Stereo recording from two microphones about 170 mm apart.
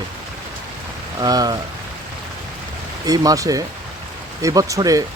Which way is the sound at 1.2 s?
25° right (ahead or behind).